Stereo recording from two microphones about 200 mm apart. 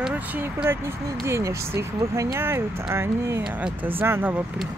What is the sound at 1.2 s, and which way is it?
Speech, 15° right (ahead or behind).